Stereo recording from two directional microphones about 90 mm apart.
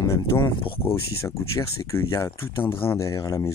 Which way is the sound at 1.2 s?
35° left (ahead or behind).